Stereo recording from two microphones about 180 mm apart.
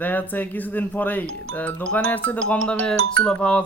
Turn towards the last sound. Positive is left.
turn(degrees=5)  # may be behind; listen again after turning